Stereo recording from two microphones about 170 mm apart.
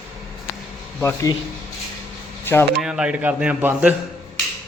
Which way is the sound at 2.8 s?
5° right (ahead or behind).